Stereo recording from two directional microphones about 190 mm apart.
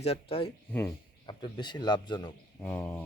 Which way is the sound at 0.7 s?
10° left (ahead or behind).